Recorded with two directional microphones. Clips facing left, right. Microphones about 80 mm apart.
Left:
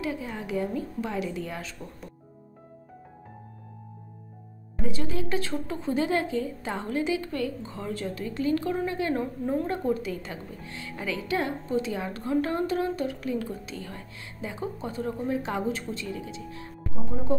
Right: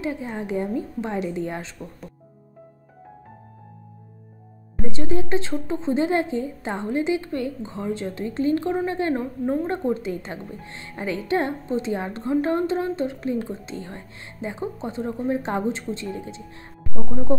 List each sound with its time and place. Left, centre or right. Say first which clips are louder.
0.0 s a woman's voice: right 4 dB; right
4.8 s a woman's voice: right 5 dB; right